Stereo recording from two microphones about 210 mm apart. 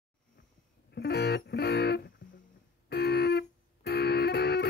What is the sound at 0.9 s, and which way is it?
Music, 50° left (ahead or behind).